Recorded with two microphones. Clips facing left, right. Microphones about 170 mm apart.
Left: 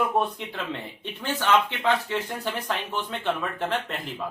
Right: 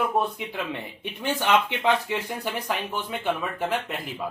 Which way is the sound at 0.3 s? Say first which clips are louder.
Right 1 dB; 10° right (ahead or behind).